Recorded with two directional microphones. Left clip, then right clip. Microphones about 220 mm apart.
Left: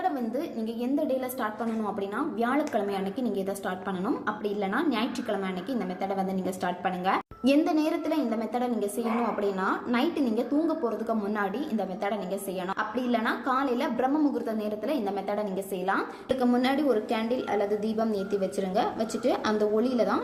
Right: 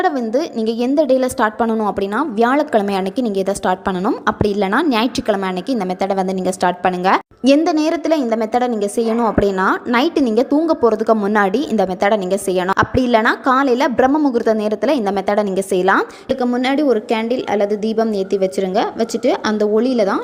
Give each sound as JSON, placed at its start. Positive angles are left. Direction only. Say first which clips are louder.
{"t": 0.0, "sound": "a woman's voice", "louder": "right 12 dB", "side_deg": -40}